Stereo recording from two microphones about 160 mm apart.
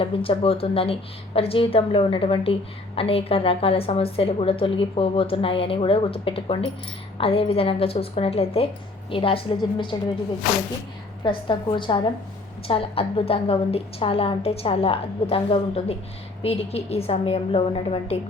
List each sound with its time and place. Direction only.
0.0 s a woman's voice: 35° left (ahead or behind)
11.2 s a woman's voice: 30° left (ahead or behind)